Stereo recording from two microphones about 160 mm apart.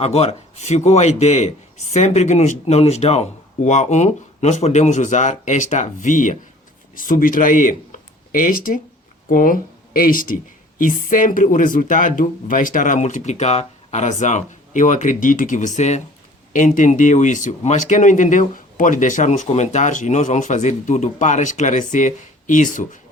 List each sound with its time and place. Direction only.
0.0 s speech: 40° left (ahead or behind)